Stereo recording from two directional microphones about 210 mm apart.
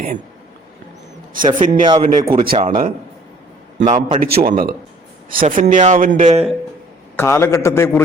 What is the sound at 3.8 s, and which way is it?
A man's voice, 40° right (ahead or behind).